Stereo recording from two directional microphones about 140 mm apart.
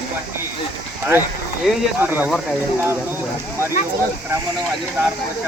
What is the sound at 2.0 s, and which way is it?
Speech, 15° right (ahead or behind).